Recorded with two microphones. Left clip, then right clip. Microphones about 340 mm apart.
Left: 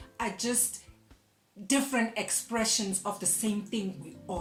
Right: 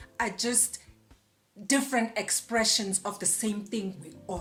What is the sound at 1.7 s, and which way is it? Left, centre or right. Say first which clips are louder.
Speech: right 2 dB; right.